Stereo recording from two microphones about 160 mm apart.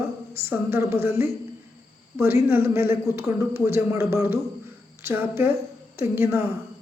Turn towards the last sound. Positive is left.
turn(degrees=-15)  # may be behind; listen again after turning